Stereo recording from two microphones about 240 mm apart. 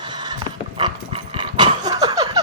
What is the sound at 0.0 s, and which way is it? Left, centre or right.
Horse, centre.